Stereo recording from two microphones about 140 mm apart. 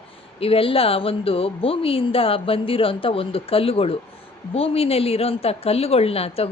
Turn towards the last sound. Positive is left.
turn(degrees=45)  # may be behind; listen again after turning